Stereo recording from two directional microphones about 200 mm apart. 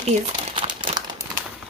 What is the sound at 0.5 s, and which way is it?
Crumpling, 25° right (ahead or behind).